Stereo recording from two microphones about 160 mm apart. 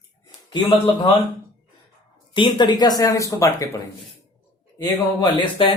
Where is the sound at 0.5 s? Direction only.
25° left (ahead or behind).